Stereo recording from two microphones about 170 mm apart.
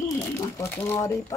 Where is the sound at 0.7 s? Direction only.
15° left (ahead or behind).